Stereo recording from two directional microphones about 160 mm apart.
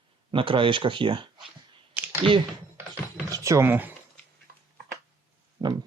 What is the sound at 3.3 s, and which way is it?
Speech, 20° right (ahead or behind).